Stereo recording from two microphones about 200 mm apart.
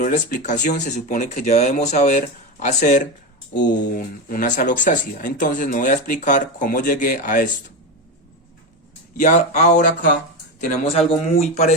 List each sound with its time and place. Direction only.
0.0 s speech: 40° left (ahead or behind)
9.1 s speech: 35° left (ahead or behind)